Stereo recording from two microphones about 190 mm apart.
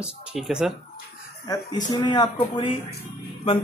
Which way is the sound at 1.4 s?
20° left (ahead or behind).